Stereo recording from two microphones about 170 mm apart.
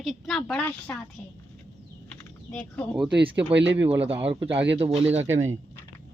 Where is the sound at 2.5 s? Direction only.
10° left (ahead or behind).